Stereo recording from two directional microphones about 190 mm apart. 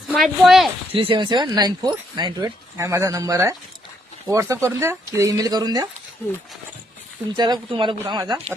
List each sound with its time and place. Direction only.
0.1 s speech: centre (ahead or behind)
0.9 s speech: 25° right (ahead or behind)
7.3 s speech: 20° right (ahead or behind)